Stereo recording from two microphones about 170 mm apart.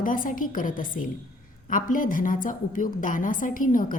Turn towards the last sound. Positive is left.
turn(degrees=50)  # may be behind; listen again after turning